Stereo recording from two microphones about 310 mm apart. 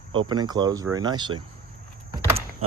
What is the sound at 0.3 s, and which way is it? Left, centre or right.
Speech, centre.